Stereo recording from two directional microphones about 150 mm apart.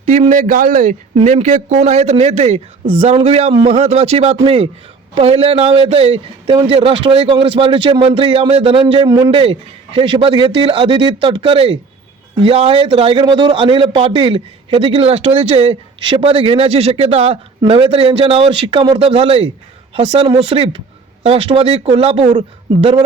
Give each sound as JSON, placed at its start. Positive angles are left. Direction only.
{"t": 0.0, "sound": "a man's voice", "side_deg": -50}
{"t": 1.1, "sound": "a man's voice", "side_deg": -50}
{"t": 9.3, "sound": "a man's voice", "side_deg": -40}